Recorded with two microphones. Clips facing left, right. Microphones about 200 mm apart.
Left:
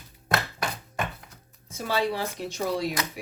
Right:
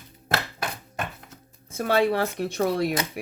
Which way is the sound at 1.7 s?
55° right (ahead or behind).